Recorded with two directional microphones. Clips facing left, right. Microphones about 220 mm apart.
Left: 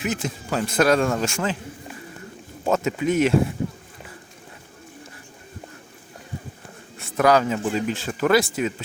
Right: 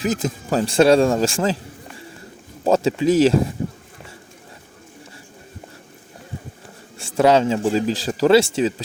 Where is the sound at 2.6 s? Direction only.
30° right (ahead or behind).